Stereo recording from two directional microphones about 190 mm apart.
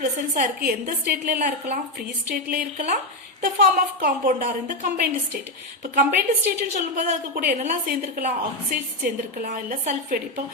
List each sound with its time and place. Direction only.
0.0 s a woman's voice: 40° right (ahead or behind)